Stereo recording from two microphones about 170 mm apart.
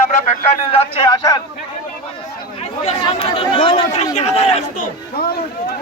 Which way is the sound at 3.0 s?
30° left (ahead or behind).